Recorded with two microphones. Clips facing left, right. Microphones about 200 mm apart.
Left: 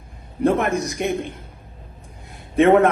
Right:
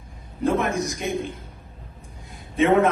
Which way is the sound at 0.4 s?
60° left (ahead or behind).